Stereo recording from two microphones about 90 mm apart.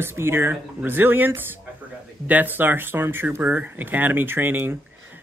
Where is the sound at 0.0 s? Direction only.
25° right (ahead or behind).